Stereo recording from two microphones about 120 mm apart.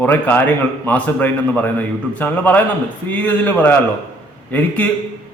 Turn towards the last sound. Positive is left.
turn(degrees=15)  # may be behind; listen again after turning